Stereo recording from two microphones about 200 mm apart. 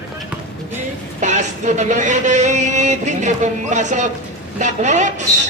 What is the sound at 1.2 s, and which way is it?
Speech, 35° right (ahead or behind).